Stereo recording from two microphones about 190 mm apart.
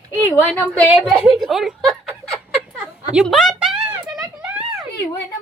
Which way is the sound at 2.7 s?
5° right (ahead or behind).